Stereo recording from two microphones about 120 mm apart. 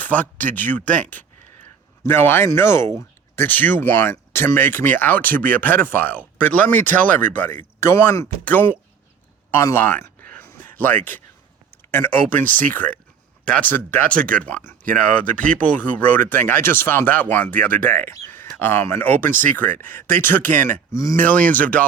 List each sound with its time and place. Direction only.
0.0 s speech: 15° left (ahead or behind)
2.0 s speech: 20° left (ahead or behind)
8.4 s speech: 15° left (ahead or behind)
9.6 s a sound: 20° left (ahead or behind)
11.9 s speech: 15° left (ahead or behind)
18.1 s a sound: 25° left (ahead or behind)
18.5 s speech: 20° left (ahead or behind)
21.2 s speech: 10° left (ahead or behind)